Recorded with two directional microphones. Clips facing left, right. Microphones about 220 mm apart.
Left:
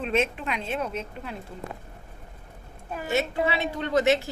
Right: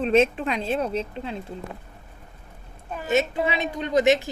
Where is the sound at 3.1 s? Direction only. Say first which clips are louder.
Right 3 dB; 20° right (ahead or behind).